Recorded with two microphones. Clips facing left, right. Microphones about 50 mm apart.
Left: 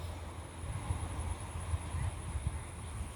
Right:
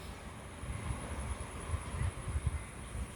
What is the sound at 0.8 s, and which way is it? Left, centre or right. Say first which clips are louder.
Vehicle: even; right.